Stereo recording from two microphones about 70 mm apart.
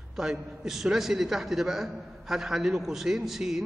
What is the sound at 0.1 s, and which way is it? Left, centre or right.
A man's voice, centre.